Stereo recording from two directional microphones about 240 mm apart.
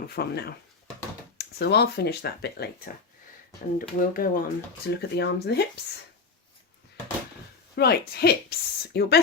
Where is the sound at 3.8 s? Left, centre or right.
Left.